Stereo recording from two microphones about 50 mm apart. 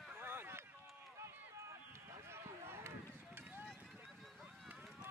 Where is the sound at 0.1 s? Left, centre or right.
Right.